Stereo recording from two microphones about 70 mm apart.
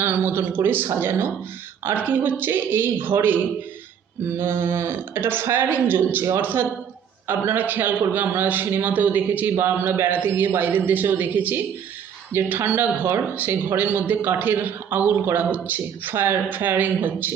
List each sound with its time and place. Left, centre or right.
0.0 s speech: right